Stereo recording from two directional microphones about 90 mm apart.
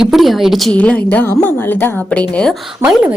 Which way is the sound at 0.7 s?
15° left (ahead or behind).